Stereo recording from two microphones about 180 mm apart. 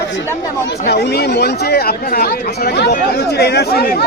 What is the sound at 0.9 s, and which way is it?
Speech, 65° left (ahead or behind).